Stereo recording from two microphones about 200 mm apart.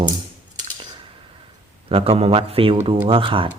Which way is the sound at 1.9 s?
30° right (ahead or behind).